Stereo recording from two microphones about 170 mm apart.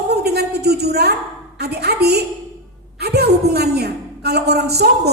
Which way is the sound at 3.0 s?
70° right (ahead or behind).